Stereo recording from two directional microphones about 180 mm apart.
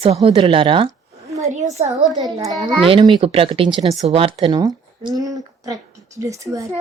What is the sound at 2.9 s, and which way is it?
A child's voice, 25° right (ahead or behind).